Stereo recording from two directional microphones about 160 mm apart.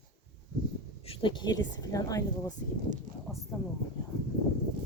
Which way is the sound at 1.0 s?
35° left (ahead or behind).